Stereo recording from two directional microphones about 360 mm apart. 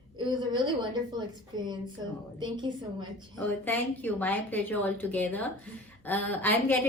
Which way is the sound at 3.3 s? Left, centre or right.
Centre.